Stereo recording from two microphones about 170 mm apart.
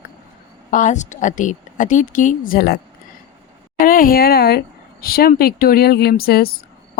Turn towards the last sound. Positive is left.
turn(degrees=65)  # may be behind; listen again after turning